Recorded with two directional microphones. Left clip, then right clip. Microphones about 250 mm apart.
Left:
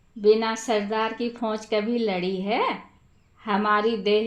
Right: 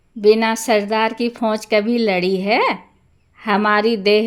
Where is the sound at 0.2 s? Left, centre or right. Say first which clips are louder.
Right 6 dB; right.